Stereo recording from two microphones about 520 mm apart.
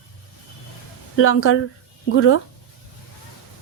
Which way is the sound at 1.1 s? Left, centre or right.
Left.